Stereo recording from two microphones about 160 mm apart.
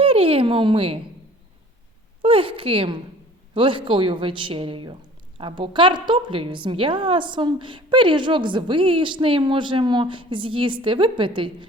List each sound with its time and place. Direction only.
0.0 s speech: 35° right (ahead or behind)
2.2 s a woman's voice: 35° right (ahead or behind)